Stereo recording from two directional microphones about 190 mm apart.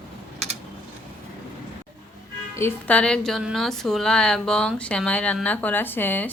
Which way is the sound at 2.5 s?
10° left (ahead or behind).